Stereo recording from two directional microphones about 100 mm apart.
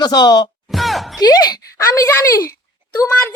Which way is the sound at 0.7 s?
Centre (ahead or behind).